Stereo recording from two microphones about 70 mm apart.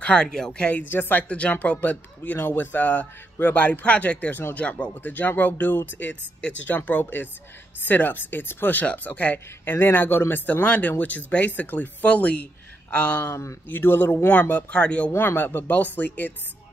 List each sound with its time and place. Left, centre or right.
0.0 s speech: centre
0.7 s speech: left
1.3 s speech: centre
13.3 s a man's voice: left
13.7 s speech: left
15.1 s speech: left